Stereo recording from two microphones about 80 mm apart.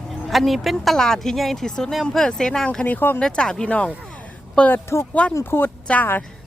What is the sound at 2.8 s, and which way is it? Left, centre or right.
Speech, left.